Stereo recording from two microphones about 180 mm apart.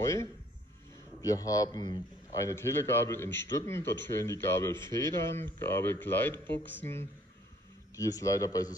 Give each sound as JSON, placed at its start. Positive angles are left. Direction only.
{"t": 0.0, "sound": "a man's voice", "side_deg": 15}